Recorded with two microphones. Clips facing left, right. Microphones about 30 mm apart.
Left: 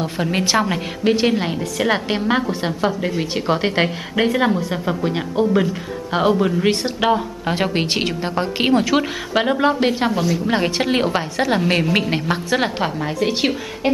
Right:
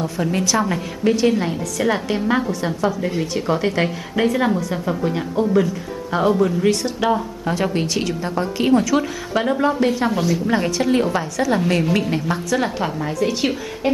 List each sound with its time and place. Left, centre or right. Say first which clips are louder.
0.0 s speech: even; left
10.1 s a woman's voice: even; centre
10.5 s speech: even; left